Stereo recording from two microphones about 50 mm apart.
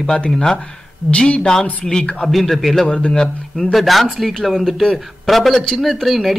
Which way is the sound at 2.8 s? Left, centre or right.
Centre.